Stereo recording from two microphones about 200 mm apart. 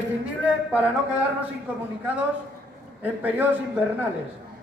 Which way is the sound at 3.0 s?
10° right (ahead or behind).